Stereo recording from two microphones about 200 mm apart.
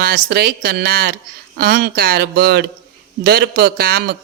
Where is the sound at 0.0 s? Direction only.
50° right (ahead or behind).